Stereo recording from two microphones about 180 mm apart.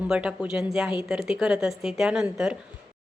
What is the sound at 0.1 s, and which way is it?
A woman's voice, 5° right (ahead or behind).